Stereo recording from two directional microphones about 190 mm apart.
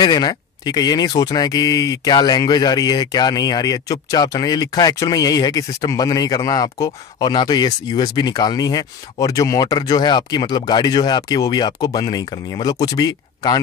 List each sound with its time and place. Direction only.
0.0 s speech: 20° left (ahead or behind)